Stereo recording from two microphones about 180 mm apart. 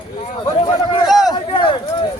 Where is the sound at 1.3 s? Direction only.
25° left (ahead or behind).